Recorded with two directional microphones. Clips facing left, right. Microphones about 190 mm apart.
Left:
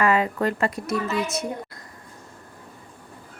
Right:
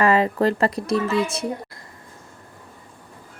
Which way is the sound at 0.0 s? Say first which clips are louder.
Right 3 dB; 35° right (ahead or behind).